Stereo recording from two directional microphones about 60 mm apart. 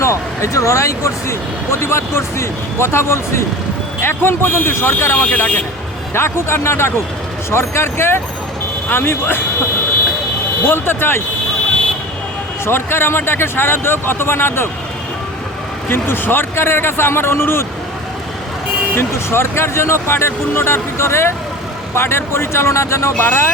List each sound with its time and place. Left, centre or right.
0.0 s speech: left
6.1 s speech: left
10.6 s speech: left
12.6 s speech: left
15.9 s speech: left
18.9 s speech: left